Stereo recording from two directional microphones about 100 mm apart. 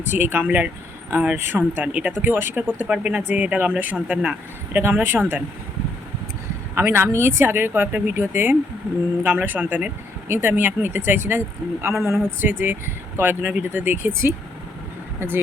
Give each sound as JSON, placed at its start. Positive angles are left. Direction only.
{"t": 0.0, "sound": "speech", "side_deg": -20}
{"t": 4.8, "sound": "speech", "side_deg": -25}
{"t": 6.7, "sound": "speech", "side_deg": -25}